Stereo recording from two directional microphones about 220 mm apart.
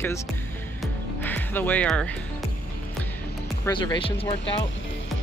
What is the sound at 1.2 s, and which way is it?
Speech, 10° left (ahead or behind).